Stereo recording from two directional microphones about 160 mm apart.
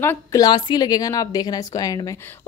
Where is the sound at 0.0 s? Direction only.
15° left (ahead or behind).